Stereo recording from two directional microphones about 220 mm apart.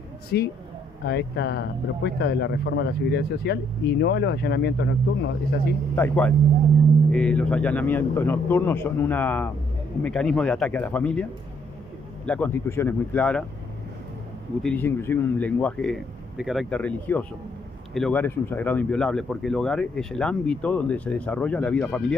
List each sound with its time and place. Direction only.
0.3 s speech: 50° left (ahead or behind)
5.9 s a man's voice: 10° left (ahead or behind)
12.3 s a man's voice: 10° left (ahead or behind)
14.6 s a man's voice: 5° left (ahead or behind)